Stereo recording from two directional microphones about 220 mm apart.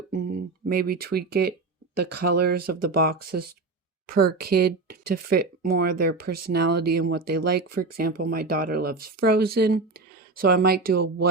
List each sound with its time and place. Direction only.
0.1 s a woman's voice: 40° right (ahead or behind)